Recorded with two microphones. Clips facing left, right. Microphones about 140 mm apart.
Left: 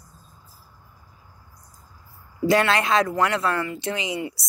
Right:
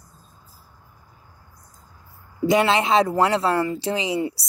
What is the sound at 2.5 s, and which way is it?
A woman's voice, 20° right (ahead or behind).